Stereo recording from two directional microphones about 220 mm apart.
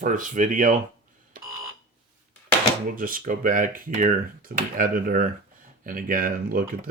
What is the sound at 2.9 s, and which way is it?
Speech, 40° right (ahead or behind).